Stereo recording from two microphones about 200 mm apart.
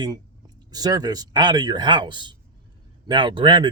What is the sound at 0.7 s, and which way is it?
Speech, 20° right (ahead or behind).